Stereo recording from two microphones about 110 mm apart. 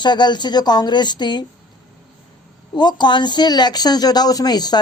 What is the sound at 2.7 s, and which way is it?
Speech, 40° left (ahead or behind).